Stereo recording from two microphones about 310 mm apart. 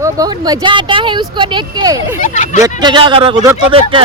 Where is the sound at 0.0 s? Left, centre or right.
Centre.